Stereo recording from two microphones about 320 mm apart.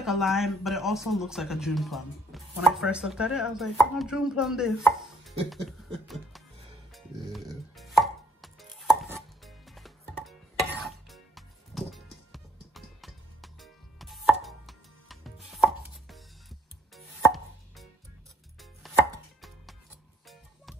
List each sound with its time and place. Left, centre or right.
0.0 s speech: centre
7.7 s chopping: centre